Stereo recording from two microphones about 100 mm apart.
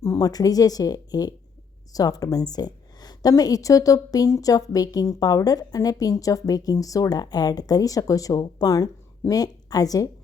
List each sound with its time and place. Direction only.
0.0 s a woman's voice: 35° left (ahead or behind)